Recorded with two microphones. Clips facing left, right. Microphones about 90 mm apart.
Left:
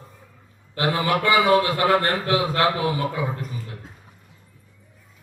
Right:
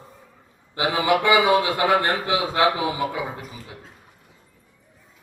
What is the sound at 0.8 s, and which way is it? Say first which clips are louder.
A man's voice: right 1 dB; 20° right (ahead or behind).